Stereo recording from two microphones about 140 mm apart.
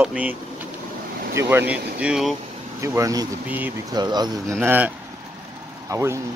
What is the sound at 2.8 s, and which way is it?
Speech, 20° right (ahead or behind).